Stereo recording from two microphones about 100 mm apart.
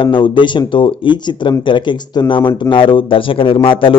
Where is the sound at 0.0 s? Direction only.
60° left (ahead or behind).